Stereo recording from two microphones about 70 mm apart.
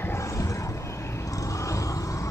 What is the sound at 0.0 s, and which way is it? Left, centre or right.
Vehicle, left.